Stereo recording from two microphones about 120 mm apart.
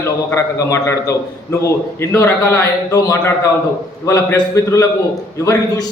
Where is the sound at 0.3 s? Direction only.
25° left (ahead or behind).